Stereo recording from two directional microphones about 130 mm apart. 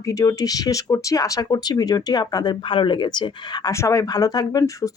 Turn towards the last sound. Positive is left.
turn(degrees=25)  # may be behind; listen again after turning